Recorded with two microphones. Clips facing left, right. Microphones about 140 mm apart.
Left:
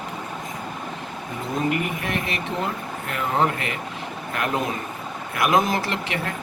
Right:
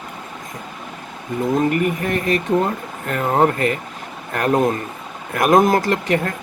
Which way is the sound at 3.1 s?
45° right (ahead or behind).